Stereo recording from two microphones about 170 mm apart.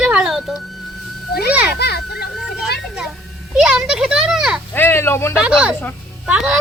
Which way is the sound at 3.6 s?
5° right (ahead or behind).